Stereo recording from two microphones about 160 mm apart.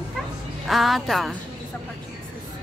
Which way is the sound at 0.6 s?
Centre (ahead or behind).